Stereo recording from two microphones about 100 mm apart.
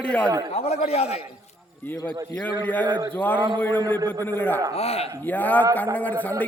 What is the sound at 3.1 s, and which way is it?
A man's voice, 20° left (ahead or behind).